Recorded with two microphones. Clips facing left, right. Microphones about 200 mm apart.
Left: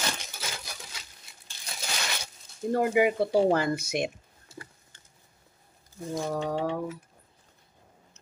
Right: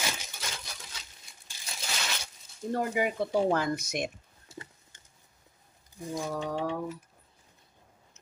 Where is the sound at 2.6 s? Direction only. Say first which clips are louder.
Left 6 dB; 10° left (ahead or behind).